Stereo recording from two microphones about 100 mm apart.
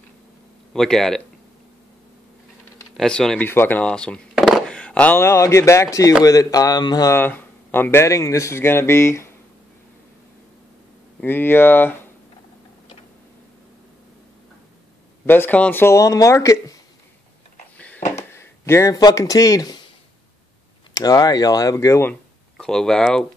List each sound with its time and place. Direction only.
0.7 s speech: 5° left (ahead or behind)
3.0 s speech: 5° left (ahead or behind)
3.4 s chop: 20° left (ahead or behind)
5.1 s a man's voice: 30° left (ahead or behind)
7.1 s speech: 20° left (ahead or behind)
11.1 s speech: 20° left (ahead or behind)
15.2 s speech: 20° left (ahead or behind)
17.7 s a sound: 15° left (ahead or behind)
18.3 s speech: 25° left (ahead or behind)
20.9 s a man's voice: 40° left (ahead or behind)
21.7 s speech: 30° left (ahead or behind)
22.6 s speech: 5° left (ahead or behind)